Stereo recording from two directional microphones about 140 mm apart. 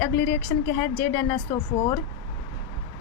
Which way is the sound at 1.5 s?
30° left (ahead or behind).